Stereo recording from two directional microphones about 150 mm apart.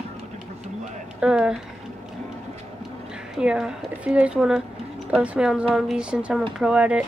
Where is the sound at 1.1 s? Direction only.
5° right (ahead or behind).